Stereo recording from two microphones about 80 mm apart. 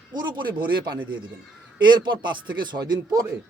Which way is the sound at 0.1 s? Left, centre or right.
Right.